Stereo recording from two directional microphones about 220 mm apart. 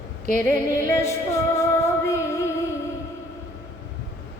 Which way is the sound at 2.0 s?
15° left (ahead or behind).